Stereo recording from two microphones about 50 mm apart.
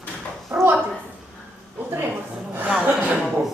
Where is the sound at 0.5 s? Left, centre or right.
Right.